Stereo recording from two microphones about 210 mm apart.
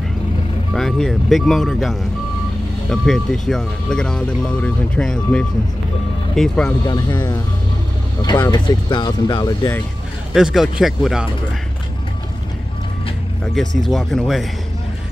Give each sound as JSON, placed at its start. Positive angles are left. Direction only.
{"t": 0.7, "sound": "speech", "side_deg": 0}
{"t": 6.9, "sound": "speech", "side_deg": 20}
{"t": 10.3, "sound": "speech", "side_deg": 0}
{"t": 13.4, "sound": "speech", "side_deg": 0}